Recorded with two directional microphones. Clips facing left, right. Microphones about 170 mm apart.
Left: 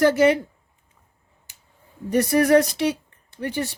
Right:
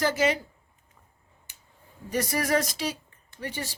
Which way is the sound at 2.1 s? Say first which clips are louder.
Left 9 dB; 60° left (ahead or behind).